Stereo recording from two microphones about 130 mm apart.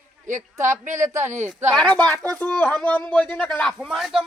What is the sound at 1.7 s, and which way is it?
A man's voice, 5° left (ahead or behind).